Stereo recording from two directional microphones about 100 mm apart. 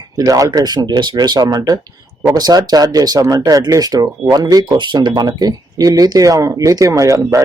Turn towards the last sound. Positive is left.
turn(degrees=-35)  # may be behind; listen again after turning